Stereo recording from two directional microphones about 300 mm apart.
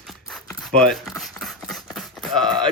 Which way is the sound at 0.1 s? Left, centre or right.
Centre.